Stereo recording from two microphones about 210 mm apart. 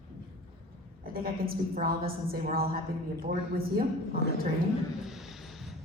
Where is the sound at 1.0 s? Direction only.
45° right (ahead or behind).